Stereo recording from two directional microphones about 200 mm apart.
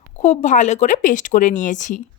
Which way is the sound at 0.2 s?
40° left (ahead or behind).